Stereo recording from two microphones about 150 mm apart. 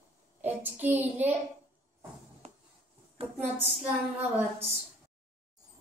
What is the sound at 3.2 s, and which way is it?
Speech, 40° right (ahead or behind).